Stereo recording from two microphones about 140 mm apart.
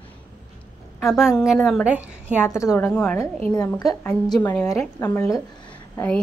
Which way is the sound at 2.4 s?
20° left (ahead or behind).